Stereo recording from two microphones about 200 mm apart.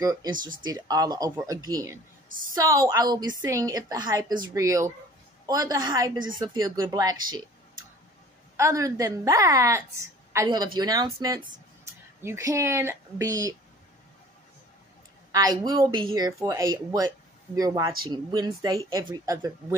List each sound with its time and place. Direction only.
0.0 s a woman's voice: 20° right (ahead or behind)
0.4 s speech: 45° right (ahead or behind)
0.7 s a woman's voice: 20° right (ahead or behind)
8.5 s a woman's voice: 15° right (ahead or behind)
15.3 s a woman's voice: 20° right (ahead or behind)